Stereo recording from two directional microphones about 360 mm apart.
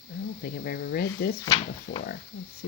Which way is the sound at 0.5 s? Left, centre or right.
Left.